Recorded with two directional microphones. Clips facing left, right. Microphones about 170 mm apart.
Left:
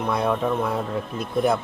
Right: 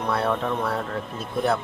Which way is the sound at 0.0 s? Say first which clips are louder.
Left 1 dB; 10° left (ahead or behind).